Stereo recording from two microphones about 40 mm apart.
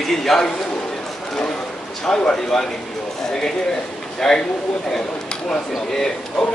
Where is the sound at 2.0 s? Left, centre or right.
Left.